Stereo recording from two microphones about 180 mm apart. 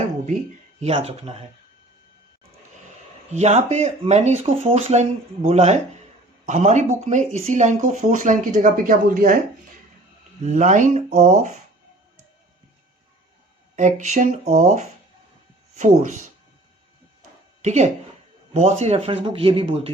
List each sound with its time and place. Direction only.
0.8 s speech: 35° right (ahead or behind)
3.3 s speech: 40° right (ahead or behind)
10.4 s speech: 40° right (ahead or behind)
13.7 s speech: 40° right (ahead or behind)
17.6 s speech: 40° right (ahead or behind)